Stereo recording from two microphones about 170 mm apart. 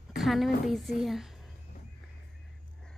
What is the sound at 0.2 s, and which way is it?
A woman's voice, centre (ahead or behind).